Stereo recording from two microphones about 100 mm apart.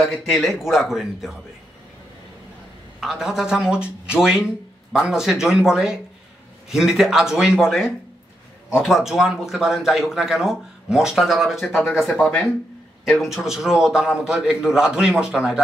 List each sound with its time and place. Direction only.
0.0 s speech: centre (ahead or behind)
3.0 s speech: 5° right (ahead or behind)
11.7 s speech: 20° left (ahead or behind)
12.2 s speech: 10° left (ahead or behind)
13.2 s speech: 5° right (ahead or behind)